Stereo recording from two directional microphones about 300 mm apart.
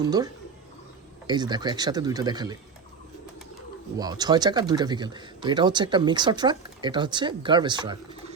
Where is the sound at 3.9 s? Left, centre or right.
Centre.